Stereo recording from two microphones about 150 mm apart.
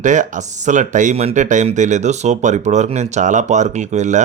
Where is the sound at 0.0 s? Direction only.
55° right (ahead or behind).